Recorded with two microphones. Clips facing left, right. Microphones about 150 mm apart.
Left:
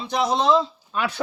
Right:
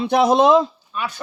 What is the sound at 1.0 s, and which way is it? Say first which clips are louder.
Speech: left 2 dB; 75° left (ahead or behind).